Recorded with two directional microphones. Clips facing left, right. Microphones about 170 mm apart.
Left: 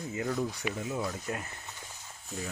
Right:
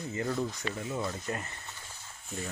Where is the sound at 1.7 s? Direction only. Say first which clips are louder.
Left 1 dB; 15° left (ahead or behind).